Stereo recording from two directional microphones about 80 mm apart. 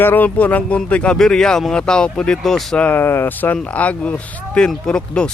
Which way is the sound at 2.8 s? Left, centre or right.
Left.